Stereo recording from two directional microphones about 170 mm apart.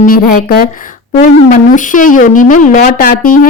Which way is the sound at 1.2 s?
50° left (ahead or behind).